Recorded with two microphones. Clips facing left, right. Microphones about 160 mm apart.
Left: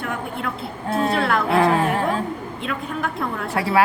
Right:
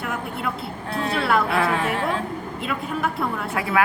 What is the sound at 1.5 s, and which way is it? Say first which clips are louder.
Speech: left 5 dB; 40° left (ahead or behind).